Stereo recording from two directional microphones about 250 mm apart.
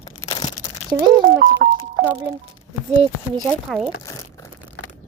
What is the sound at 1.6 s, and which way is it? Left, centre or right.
Music, right.